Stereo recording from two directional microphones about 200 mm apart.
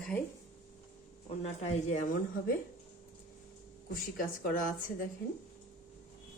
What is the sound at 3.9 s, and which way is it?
Speech, 45° left (ahead or behind).